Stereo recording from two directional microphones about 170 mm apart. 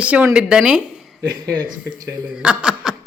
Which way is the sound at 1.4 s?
25° right (ahead or behind).